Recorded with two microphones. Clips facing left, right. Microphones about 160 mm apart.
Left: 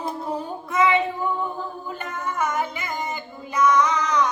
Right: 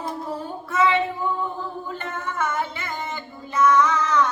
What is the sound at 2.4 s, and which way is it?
Music, 15° left (ahead or behind).